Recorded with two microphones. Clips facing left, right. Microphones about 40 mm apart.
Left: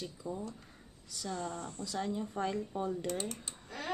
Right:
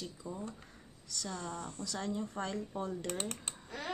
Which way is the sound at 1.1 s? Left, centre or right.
Centre.